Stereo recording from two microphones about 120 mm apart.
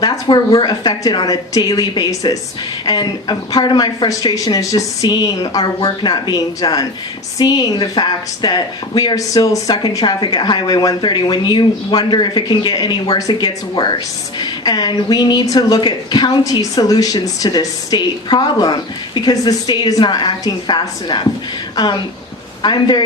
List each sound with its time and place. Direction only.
0.0 s a woman's voice: 35° left (ahead or behind)
22.6 s a woman's voice: 40° left (ahead or behind)